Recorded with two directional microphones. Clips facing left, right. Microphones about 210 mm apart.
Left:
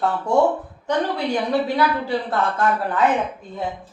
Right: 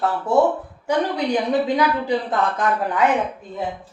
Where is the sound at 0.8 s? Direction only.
15° right (ahead or behind).